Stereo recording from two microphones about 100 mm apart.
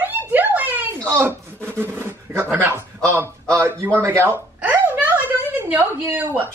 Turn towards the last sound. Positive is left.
turn(degrees=-20)  # may be behind; listen again after turning